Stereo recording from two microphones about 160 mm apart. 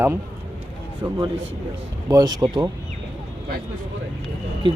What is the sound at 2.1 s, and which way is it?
Speech, 20° right (ahead or behind).